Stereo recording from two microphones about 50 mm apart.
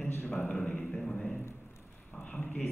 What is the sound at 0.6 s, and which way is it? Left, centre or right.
Speech, centre.